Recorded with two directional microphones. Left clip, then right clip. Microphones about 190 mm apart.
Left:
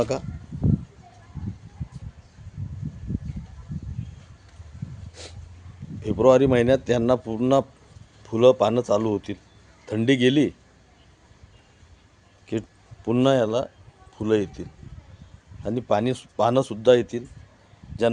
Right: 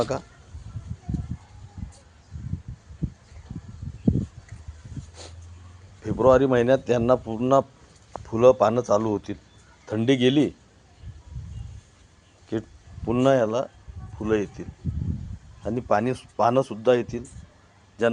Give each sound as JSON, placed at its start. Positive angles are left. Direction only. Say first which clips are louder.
{"t": 0.1, "sound": "a man's voice", "louder": "left 1 dB", "side_deg": 20}
{"t": 5.2, "sound": "dog", "louder": "left 3 dB", "side_deg": 15}
{"t": 6.0, "sound": "a man's voice", "louder": "left 1 dB", "side_deg": 15}
{"t": 12.5, "sound": "a man's voice", "louder": "left 1 dB", "side_deg": 15}